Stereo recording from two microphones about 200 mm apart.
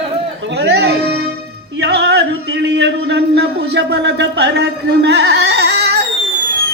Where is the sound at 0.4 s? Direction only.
55° right (ahead or behind).